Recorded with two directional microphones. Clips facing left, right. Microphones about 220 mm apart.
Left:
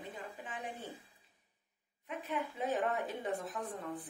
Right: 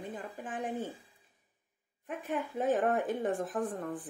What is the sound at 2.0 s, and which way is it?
A woman's voice, 50° right (ahead or behind).